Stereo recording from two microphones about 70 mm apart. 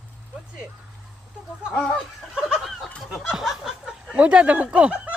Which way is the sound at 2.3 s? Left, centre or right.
Centre.